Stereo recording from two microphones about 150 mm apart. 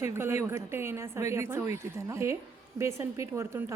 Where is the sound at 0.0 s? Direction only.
15° right (ahead or behind).